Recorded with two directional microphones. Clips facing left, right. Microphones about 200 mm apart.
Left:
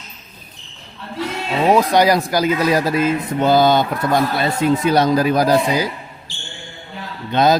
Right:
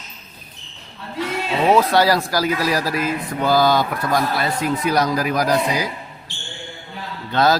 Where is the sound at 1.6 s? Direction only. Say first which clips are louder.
Left 2 dB; 15° left (ahead or behind).